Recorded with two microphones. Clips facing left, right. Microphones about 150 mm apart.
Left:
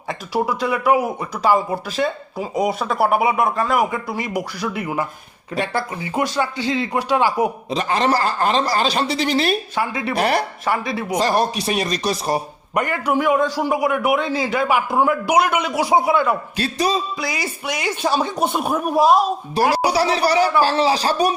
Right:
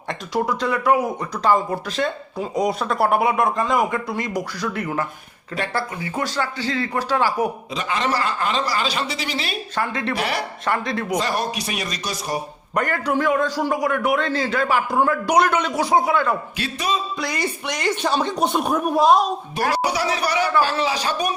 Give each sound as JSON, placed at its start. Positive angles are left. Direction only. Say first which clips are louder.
{"t": 0.1, "sound": "speech", "louder": "left 1 dB", "side_deg": 5}
{"t": 7.7, "sound": "speech", "louder": "left 5 dB", "side_deg": 35}
{"t": 9.7, "sound": "speech", "louder": "left 1 dB", "side_deg": 10}
{"t": 10.2, "sound": "speech", "louder": "left 9 dB", "side_deg": 40}
{"t": 10.7, "sound": "speech", "louder": "even", "side_deg": 5}
{"t": 11.2, "sound": "speech", "louder": "left 5 dB", "side_deg": 35}
{"t": 12.7, "sound": "speech", "louder": "left 2 dB", "side_deg": 10}
{"t": 16.6, "sound": "speech", "louder": "left 4 dB", "side_deg": 35}
{"t": 17.2, "sound": "speech", "louder": "right 1 dB", "side_deg": 5}
{"t": 19.7, "sound": "speech", "louder": "left 4 dB", "side_deg": 35}